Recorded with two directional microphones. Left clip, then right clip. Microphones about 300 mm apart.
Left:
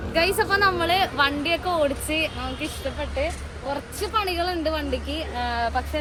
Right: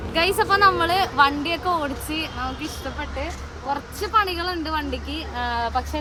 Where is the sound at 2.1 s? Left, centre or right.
Right.